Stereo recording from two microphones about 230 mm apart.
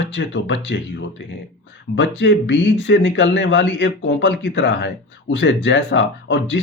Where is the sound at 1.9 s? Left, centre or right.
Left.